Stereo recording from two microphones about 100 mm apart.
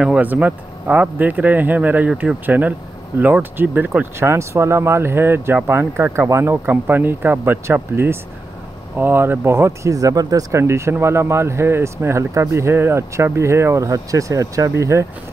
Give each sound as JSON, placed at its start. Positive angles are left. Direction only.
{"t": 0.0, "sound": "speech", "side_deg": -15}